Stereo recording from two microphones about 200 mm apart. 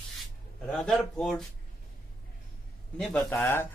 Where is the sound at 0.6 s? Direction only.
5° left (ahead or behind).